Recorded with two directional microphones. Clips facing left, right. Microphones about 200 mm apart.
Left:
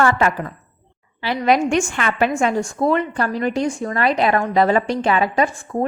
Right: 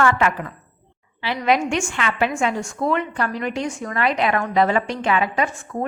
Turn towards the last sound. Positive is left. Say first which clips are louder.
# left 4 dB
turn(degrees=35)  # may be behind; listen again after turning